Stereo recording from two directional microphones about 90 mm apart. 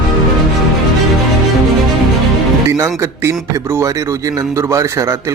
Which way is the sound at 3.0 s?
30° right (ahead or behind).